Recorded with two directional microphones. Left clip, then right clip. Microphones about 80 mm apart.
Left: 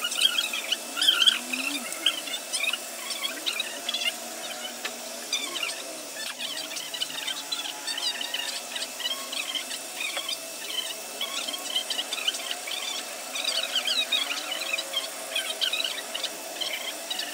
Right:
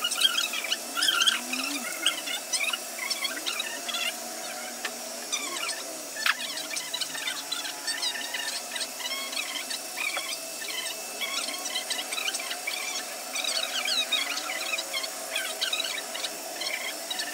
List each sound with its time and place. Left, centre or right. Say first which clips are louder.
0.1 s vehicle: left 1 dB; right
3.1 s a sound: left 1 dB; right
8.7 s squeal: left 1 dB; right
11.1 s squeal: even; right
14.3 s a sound: left 1 dB; right
15.6 s squeal: left 2 dB; right